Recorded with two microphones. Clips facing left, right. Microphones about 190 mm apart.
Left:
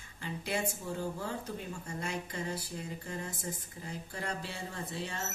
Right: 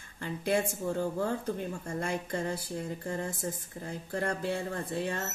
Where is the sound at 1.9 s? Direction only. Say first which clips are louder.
Right 5 dB; 50° right (ahead or behind).